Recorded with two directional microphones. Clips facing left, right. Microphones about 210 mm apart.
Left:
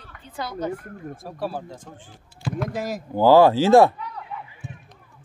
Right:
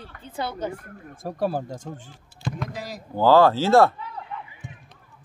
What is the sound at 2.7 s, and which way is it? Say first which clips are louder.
Speech: left 7 dB; 50° left (ahead or behind).